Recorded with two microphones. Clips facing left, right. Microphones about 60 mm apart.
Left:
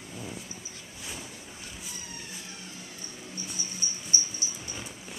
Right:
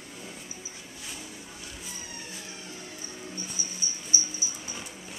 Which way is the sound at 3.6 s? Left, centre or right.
Left.